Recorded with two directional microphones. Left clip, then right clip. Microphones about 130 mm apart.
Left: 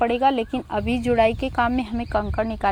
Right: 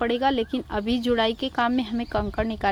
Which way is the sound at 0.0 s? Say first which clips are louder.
Left 3 dB; 10° right (ahead or behind).